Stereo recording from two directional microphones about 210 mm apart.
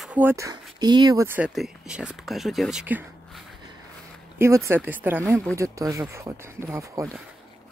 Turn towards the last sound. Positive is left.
turn(degrees=-15)  # may be behind; listen again after turning